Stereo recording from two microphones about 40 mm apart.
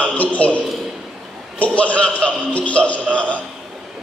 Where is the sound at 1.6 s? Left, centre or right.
Left.